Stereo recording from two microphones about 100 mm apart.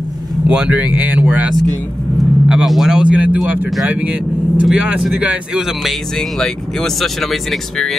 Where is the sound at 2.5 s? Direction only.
5° right (ahead or behind).